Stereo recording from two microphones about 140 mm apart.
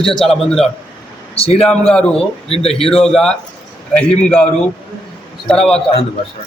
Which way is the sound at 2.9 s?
5° left (ahead or behind).